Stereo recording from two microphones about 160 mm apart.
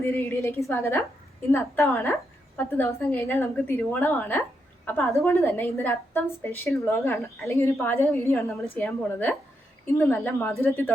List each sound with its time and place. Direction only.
0.0 s a woman's voice: 15° left (ahead or behind)